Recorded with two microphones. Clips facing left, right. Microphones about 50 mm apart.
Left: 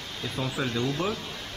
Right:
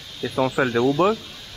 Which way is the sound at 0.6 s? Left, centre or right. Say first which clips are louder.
Right 10 dB; right.